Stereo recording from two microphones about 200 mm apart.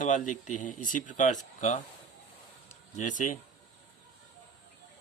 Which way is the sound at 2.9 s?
40° left (ahead or behind).